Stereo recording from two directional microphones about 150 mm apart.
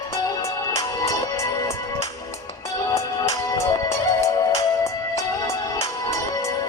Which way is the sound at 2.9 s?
20° left (ahead or behind).